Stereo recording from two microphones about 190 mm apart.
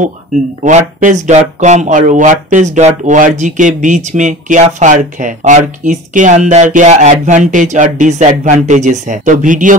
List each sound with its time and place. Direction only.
0.7 s speech: 40° right (ahead or behind)